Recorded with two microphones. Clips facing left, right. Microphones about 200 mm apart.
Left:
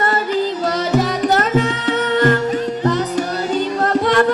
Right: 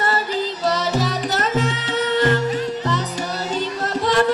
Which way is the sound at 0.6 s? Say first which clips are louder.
Left 3 dB; 55° left (ahead or behind).